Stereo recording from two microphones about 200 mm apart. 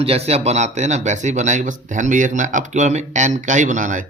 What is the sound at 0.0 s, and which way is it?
Speech, 30° right (ahead or behind).